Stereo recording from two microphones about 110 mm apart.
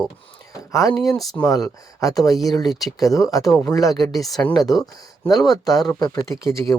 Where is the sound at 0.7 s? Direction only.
35° left (ahead or behind).